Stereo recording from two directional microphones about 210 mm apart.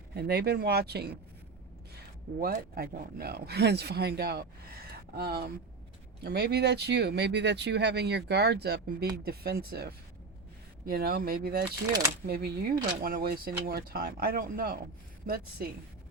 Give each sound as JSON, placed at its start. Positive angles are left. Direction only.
{"t": 0.1, "sound": "speech", "side_deg": -50}
{"t": 2.4, "sound": "speech", "side_deg": -45}
{"t": 11.9, "sound": "speech", "side_deg": -20}
{"t": 12.2, "sound": "speech", "side_deg": -50}